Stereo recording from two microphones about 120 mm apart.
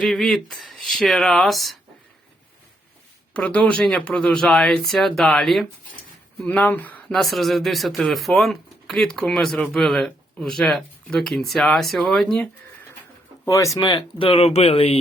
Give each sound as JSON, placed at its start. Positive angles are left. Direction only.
{"t": 0.0, "sound": "speech", "side_deg": 0}
{"t": 3.3, "sound": "speech", "side_deg": 10}
{"t": 7.2, "sound": "speech", "side_deg": 0}
{"t": 13.4, "sound": "speech", "side_deg": 25}
{"t": 13.7, "sound": "speech", "side_deg": 40}